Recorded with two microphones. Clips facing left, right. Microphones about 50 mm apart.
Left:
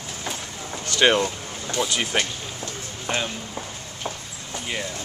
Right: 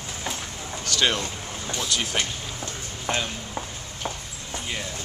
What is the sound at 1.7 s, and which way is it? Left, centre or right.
Speech, centre.